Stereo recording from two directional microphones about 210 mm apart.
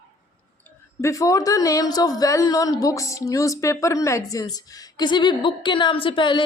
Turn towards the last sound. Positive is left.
turn(degrees=25)  # may be behind; listen again after turning